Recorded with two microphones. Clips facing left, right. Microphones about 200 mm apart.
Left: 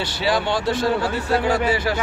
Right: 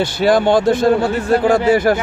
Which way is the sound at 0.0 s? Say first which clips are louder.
Right 8 dB; 50° right (ahead or behind).